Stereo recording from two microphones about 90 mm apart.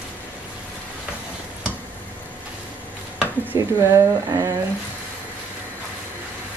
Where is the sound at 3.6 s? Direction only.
35° right (ahead or behind).